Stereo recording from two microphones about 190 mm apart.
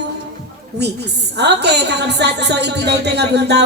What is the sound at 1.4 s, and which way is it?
A woman's voice, 60° right (ahead or behind).